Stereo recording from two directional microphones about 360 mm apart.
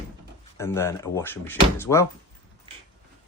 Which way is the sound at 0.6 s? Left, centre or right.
Centre.